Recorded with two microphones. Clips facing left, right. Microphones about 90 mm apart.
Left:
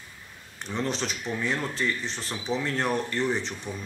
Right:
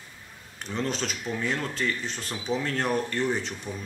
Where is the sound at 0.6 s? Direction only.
Centre (ahead or behind).